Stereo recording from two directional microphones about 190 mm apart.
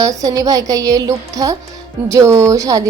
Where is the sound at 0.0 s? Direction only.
20° right (ahead or behind).